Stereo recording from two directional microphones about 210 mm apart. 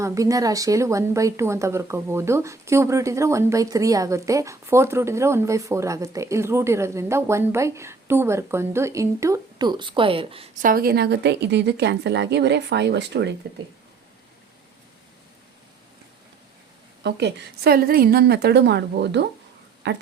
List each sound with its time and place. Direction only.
0.0 s a woman's voice: 15° right (ahead or behind); by 13.3 s 55° right (ahead or behind)
17.0 s a woman's voice: 55° right (ahead or behind)